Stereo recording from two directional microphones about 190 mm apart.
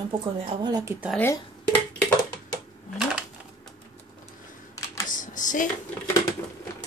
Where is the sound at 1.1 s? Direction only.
10° left (ahead or behind).